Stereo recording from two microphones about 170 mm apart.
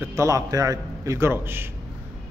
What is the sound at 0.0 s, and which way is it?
A man's voice, 15° right (ahead or behind).